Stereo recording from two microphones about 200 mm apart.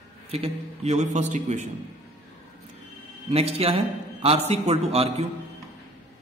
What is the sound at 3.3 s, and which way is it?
A man's voice, 30° right (ahead or behind).